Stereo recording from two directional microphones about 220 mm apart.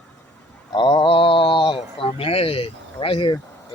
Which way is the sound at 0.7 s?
20° left (ahead or behind).